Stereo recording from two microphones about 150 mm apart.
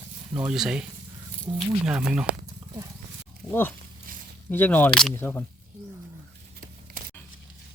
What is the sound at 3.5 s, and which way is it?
Speech, 15° left (ahead or behind).